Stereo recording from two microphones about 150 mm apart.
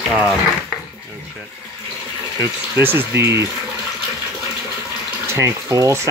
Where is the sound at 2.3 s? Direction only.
15° right (ahead or behind).